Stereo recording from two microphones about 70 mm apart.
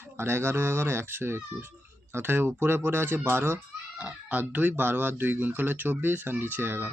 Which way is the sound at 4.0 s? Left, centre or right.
Right.